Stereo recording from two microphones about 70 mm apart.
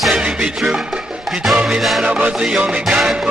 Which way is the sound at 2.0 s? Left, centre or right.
Centre.